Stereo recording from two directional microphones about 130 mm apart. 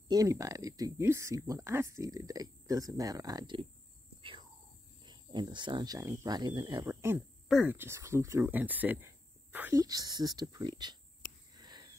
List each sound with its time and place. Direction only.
0.1 s speech: 25° right (ahead or behind)
4.2 s whispering: 40° right (ahead or behind)
5.0 s speech: 35° right (ahead or behind)
5.9 s speech: 25° right (ahead or behind)
6.9 s a sound: 20° right (ahead or behind)
7.4 s speech: 5° right (ahead or behind)
7.7 s speech: 20° right (ahead or behind)
9.8 s speech: 30° right (ahead or behind)
11.5 s a sound: 35° right (ahead or behind)